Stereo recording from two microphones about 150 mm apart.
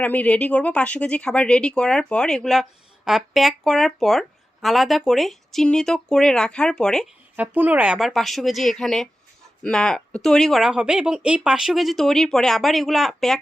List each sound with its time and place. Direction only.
0.0 s speech: 10° left (ahead or behind)
7.3 s speech: 10° right (ahead or behind)